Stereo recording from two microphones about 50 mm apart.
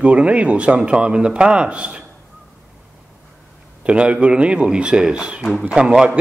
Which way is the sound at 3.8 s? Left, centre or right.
Right.